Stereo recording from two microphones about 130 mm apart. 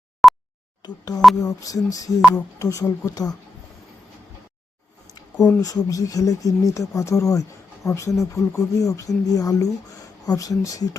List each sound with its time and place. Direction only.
0.2 s a sound: centre (ahead or behind)
0.8 s speech: 30° left (ahead or behind)
5.5 s speech: 25° left (ahead or behind)